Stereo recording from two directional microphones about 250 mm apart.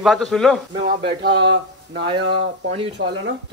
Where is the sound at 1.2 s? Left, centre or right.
Right.